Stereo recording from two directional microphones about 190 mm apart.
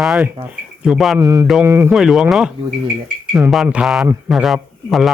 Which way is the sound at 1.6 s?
15° right (ahead or behind).